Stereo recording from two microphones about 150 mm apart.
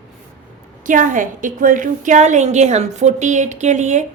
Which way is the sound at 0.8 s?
60° right (ahead or behind).